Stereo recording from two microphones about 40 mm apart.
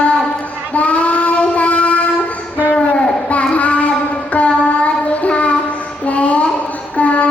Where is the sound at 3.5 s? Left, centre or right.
Left.